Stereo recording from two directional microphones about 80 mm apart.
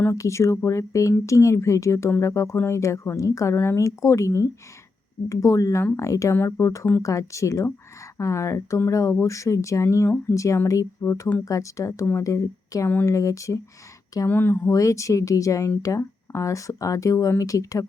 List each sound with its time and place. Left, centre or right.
0.2 s speech: left
14.3 s speech: left
14.7 s speech: left